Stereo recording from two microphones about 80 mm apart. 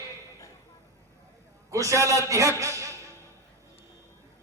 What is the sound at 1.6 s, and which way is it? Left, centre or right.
Speech, right.